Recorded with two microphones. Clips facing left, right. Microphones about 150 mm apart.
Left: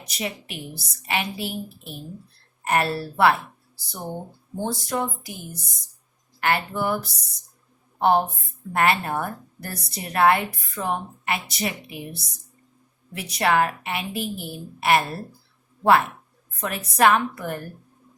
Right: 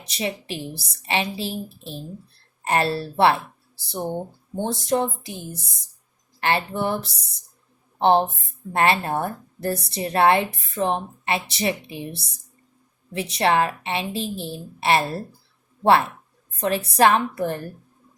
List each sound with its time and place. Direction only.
0.1 s a woman's voice: 30° right (ahead or behind)
4.5 s a woman's voice: 25° right (ahead or behind)